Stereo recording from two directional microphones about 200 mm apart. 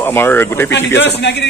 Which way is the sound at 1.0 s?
60° left (ahead or behind).